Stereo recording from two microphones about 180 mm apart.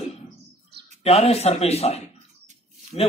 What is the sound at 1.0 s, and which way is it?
A man's voice, 35° left (ahead or behind).